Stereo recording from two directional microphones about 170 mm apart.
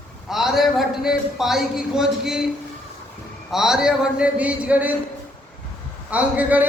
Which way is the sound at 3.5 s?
Centre (ahead or behind).